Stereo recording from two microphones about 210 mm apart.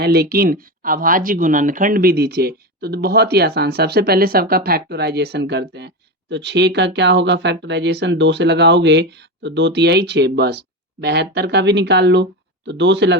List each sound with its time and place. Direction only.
0.0 s speech: 50° right (ahead or behind)